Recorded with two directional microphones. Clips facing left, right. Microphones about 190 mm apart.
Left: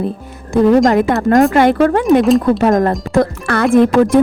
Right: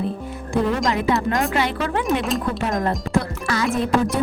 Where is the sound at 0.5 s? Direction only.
45° left (ahead or behind).